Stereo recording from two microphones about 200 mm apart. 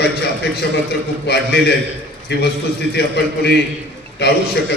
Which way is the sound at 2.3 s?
55° left (ahead or behind).